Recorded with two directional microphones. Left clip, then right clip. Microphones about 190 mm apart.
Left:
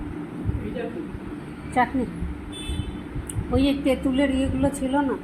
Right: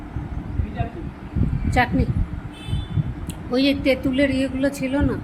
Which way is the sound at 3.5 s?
25° right (ahead or behind).